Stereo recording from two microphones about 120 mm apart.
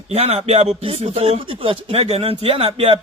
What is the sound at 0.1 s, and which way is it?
Music, 60° right (ahead or behind).